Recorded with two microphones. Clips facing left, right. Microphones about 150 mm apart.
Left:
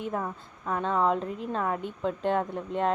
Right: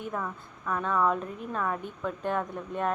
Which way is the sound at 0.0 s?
30° left (ahead or behind).